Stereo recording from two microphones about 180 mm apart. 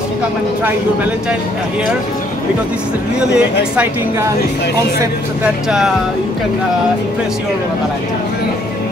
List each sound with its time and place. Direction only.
3.3 s a woman's voice: 5° right (ahead or behind)